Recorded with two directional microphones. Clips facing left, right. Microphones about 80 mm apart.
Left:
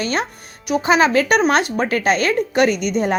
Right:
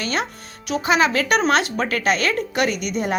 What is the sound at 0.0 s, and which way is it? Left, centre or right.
Speech, left.